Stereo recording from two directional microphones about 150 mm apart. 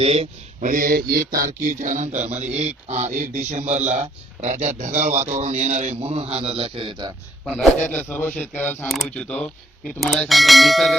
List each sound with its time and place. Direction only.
0.0 s speech: 45° right (ahead or behind)
0.7 s mantra: 70° right (ahead or behind)
1.6 s speech: 55° right (ahead or behind); by 7.1 s 35° right (ahead or behind)
7.4 s a man's voice: 5° left (ahead or behind)